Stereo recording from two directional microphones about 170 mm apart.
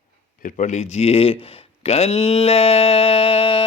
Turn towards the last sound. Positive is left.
turn(degrees=30)  # may be behind; listen again after turning